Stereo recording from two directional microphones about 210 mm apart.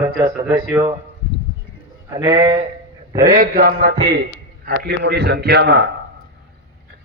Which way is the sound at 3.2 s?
40° right (ahead or behind).